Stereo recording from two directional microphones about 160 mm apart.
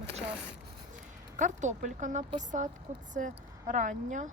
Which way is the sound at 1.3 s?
50° right (ahead or behind).